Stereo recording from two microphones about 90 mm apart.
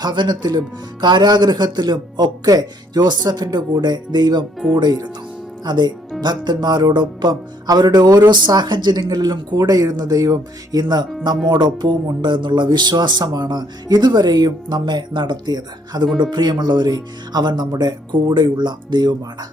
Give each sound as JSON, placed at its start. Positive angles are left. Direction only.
{"t": 0.0, "sound": "speech", "side_deg": -55}
{"t": 11.4, "sound": "speech", "side_deg": -55}